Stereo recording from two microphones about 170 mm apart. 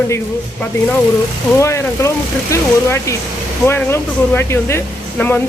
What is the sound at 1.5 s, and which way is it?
Speech, 15° left (ahead or behind).